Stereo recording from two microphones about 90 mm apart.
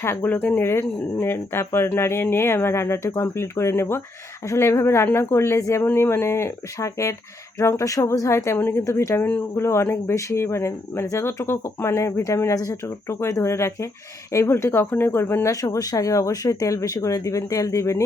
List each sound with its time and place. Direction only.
0.0 s speech: 25° left (ahead or behind)
15.4 s speech: 35° left (ahead or behind)